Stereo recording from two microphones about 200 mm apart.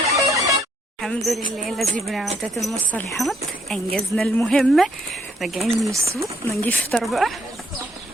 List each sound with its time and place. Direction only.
0.1 s music: 15° right (ahead or behind)
1.0 s speech: centre (ahead or behind)
5.9 s speech: 15° right (ahead or behind)
6.5 s speech: 5° left (ahead or behind)